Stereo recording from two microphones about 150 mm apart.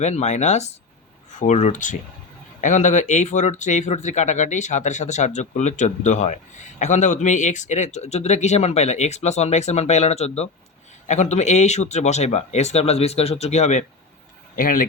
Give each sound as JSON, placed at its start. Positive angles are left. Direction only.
{"t": 0.0, "sound": "speech", "side_deg": 50}
{"t": 14.5, "sound": "speech", "side_deg": 65}